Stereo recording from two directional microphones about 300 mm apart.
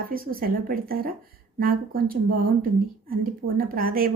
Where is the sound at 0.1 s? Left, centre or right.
Right.